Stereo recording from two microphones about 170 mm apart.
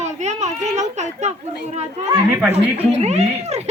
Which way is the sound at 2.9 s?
40° right (ahead or behind).